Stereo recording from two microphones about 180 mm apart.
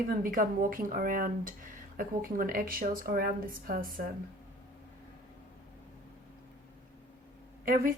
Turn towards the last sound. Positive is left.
turn(degrees=-50)  # may be behind; listen again after turning